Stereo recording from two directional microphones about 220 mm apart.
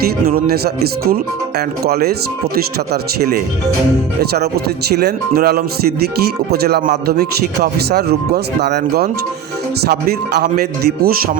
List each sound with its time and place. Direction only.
0.0 s speech: 45° right (ahead or behind)